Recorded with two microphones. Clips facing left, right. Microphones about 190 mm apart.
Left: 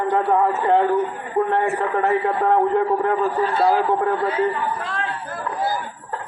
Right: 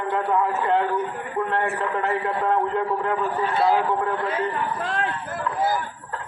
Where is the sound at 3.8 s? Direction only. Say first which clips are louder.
Left 4 dB; 35° left (ahead or behind).